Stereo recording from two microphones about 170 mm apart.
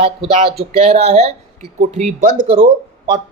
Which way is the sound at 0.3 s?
35° right (ahead or behind).